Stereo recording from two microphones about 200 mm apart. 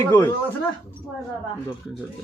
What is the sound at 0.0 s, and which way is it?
Speech, 10° left (ahead or behind).